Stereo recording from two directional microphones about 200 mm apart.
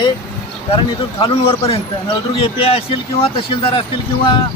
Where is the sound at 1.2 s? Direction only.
25° left (ahead or behind).